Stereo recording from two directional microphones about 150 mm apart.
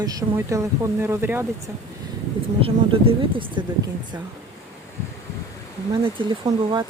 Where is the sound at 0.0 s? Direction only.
25° right (ahead or behind).